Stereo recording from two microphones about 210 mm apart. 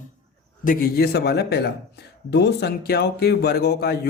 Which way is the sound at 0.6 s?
40° left (ahead or behind).